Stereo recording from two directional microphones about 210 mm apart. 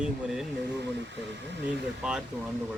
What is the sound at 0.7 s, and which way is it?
Speech, 55° right (ahead or behind).